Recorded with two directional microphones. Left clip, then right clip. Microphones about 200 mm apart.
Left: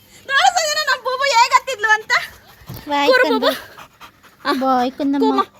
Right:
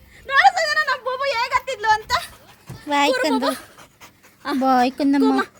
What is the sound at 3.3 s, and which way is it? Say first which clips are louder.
Speech: left 4 dB; 45° left (ahead or behind).